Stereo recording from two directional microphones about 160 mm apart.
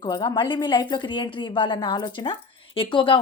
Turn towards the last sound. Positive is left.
turn(degrees=30)  # may be behind; listen again after turning